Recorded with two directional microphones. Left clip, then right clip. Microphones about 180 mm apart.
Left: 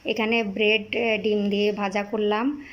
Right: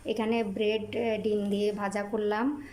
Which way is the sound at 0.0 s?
Centre (ahead or behind).